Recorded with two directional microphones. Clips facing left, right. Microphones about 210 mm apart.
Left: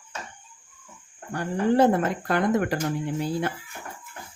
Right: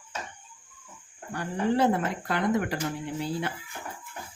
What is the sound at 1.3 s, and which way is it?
Speech, 50° left (ahead or behind).